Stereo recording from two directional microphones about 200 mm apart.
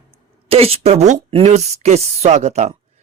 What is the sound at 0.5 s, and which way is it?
Speech, 30° right (ahead or behind).